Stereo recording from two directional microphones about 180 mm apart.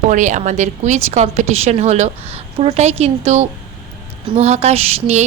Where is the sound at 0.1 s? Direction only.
45° right (ahead or behind).